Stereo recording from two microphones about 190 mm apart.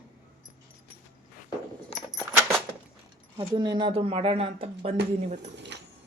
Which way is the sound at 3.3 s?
25° right (ahead or behind).